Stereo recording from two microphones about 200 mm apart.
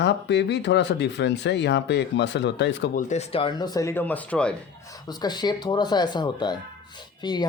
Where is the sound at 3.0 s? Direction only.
35° left (ahead or behind); by 4.5 s 5° left (ahead or behind).